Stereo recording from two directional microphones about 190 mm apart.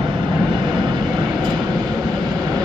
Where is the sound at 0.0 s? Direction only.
25° right (ahead or behind).